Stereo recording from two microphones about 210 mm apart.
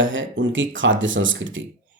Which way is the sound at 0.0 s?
65° right (ahead or behind).